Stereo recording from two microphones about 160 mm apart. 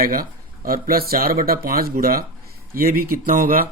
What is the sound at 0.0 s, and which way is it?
Speech, 65° right (ahead or behind).